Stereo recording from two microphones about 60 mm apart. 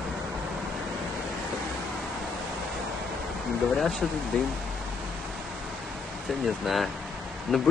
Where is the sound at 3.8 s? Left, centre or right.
Centre.